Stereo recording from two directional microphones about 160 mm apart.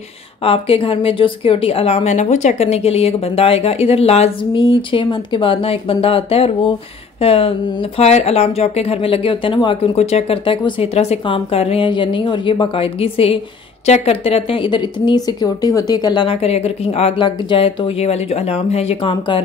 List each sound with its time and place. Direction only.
0.4 s a woman's voice: 35° left (ahead or behind)